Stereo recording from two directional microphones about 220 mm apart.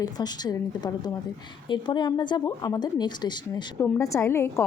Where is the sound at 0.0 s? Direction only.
20° left (ahead or behind).